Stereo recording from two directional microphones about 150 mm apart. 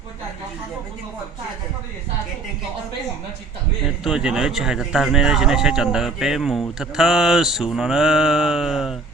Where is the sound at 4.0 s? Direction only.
5° right (ahead or behind).